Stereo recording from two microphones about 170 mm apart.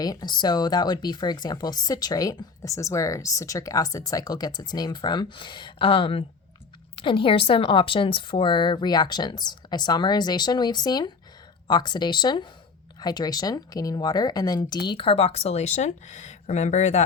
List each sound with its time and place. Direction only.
0.0 s speech: 25° left (ahead or behind); by 17.0 s 40° left (ahead or behind)